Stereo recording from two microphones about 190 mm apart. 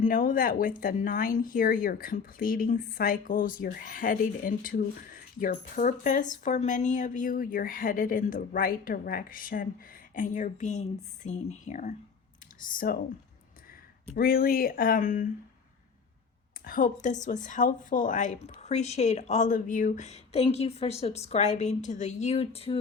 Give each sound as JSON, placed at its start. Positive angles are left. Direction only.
{"t": 0.0, "sound": "a woman's voice", "side_deg": 45}
{"t": 14.2, "sound": "speech", "side_deg": 50}
{"t": 16.6, "sound": "a woman's voice", "side_deg": 45}